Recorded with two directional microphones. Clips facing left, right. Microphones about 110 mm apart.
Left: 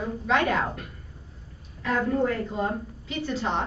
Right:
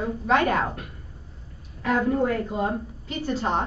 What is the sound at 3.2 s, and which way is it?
Speech, 45° right (ahead or behind).